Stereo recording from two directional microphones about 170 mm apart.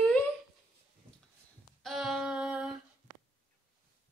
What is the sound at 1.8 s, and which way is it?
Female singing, centre (ahead or behind).